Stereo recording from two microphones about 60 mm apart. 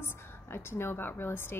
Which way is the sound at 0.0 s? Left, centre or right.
Left.